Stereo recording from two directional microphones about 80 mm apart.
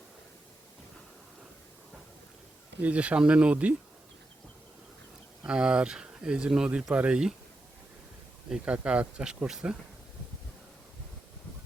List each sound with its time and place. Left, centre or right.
2.8 s speech: centre
5.5 s speech: centre
8.4 s speech: centre